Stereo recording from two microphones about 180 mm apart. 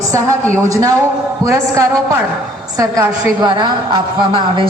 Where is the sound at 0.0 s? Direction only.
15° right (ahead or behind).